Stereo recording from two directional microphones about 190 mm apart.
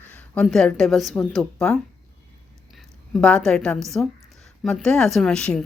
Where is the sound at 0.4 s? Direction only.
Centre (ahead or behind).